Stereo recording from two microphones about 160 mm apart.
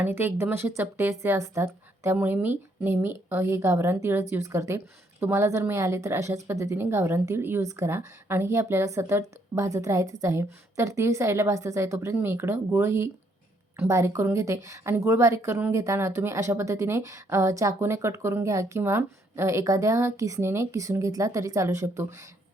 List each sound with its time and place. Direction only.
0.0 s a woman's voice: 15° right (ahead or behind)